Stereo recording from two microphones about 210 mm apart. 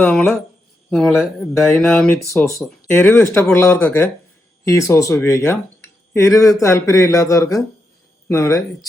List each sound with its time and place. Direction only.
0.0 s speech: centre (ahead or behind)
2.9 s speech: 10° left (ahead or behind)